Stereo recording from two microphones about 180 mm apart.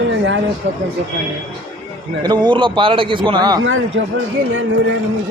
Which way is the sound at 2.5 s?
25° right (ahead or behind).